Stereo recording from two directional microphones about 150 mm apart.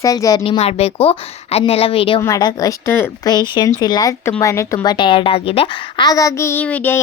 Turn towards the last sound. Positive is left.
turn(degrees=10)  # may be behind; listen again after turning